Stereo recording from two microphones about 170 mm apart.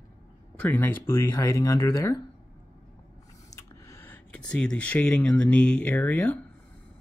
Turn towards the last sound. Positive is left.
turn(degrees=10)  # may be behind; listen again after turning